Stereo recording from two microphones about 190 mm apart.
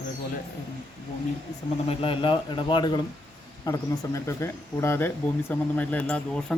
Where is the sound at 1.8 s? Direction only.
30° left (ahead or behind).